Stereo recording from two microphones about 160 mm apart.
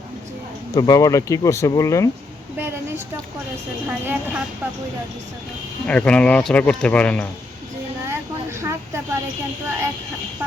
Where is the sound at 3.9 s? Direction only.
10° right (ahead or behind).